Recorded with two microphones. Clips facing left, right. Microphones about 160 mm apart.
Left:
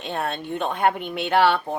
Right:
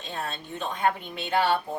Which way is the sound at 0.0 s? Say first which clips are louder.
Left 7 dB; 65° left (ahead or behind).